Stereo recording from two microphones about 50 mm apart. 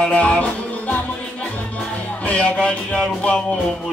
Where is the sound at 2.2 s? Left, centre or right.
Left.